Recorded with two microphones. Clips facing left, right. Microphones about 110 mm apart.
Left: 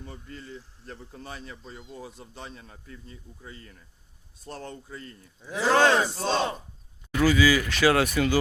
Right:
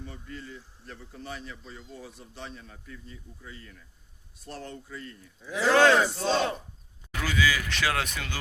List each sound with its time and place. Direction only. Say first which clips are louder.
0.0 s a man's voice: right 1 dB; 40° left (ahead or behind)
5.9 s battle cry: right 1 dB; 20° left (ahead or behind)
6.1 s a man's voice: even; 35° left (ahead or behind)
7.2 s speech: left 7 dB; 5° left (ahead or behind)